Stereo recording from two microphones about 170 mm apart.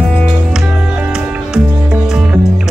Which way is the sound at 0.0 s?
5° left (ahead or behind).